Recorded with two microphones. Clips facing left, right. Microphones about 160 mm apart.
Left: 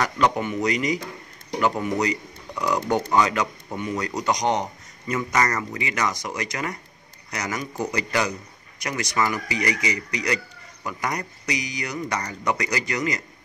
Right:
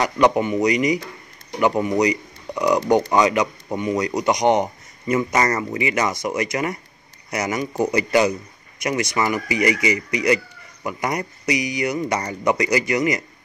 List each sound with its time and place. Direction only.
0.0 s a man's voice: 15° right (ahead or behind)